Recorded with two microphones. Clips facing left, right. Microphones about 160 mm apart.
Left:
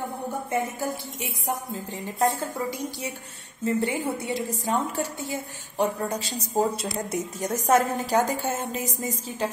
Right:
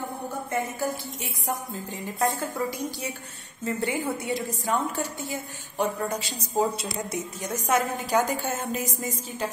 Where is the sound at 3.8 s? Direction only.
25° left (ahead or behind).